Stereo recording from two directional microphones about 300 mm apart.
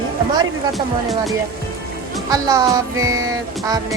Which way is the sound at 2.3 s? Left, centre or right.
Centre.